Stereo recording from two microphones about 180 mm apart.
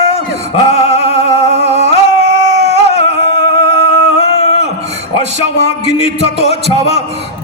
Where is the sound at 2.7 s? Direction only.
35° left (ahead or behind).